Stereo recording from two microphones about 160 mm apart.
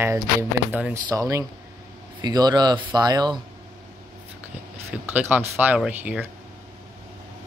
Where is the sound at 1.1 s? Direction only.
20° right (ahead or behind).